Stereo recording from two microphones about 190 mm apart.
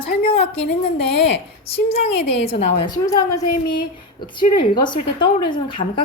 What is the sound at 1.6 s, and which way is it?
A woman's voice, 30° left (ahead or behind).